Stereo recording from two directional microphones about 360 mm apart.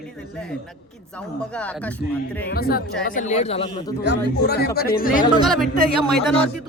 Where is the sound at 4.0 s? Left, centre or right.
Left.